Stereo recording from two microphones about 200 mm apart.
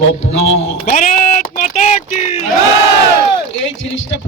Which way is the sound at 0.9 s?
40° left (ahead or behind).